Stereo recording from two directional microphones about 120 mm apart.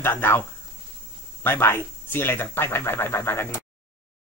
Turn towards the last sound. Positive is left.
turn(degrees=20)  # may be behind; listen again after turning